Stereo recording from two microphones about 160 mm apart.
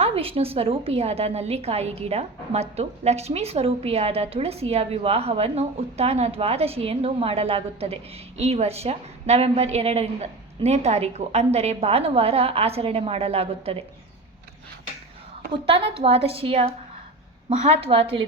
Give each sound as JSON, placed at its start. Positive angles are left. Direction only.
{"t": 0.0, "sound": "a woman's voice", "side_deg": -35}
{"t": 15.6, "sound": "a woman's voice", "side_deg": -35}